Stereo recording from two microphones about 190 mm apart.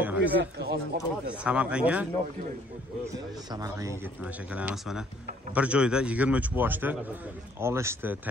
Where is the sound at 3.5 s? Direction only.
15° right (ahead or behind).